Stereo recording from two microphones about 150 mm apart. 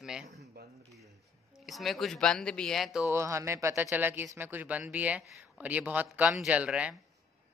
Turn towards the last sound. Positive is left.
turn(degrees=-5)  # may be behind; listen again after turning